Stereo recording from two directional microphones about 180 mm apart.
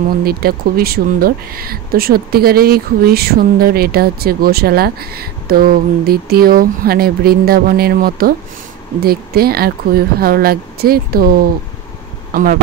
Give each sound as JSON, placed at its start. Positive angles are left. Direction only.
{"t": 0.2, "sound": "speech", "side_deg": -55}
{"t": 12.3, "sound": "speech", "side_deg": -50}